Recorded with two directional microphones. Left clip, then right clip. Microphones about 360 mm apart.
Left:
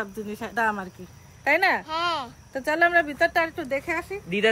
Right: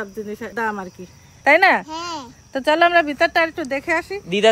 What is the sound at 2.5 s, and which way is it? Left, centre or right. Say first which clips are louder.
Speech: right 6 dB; right.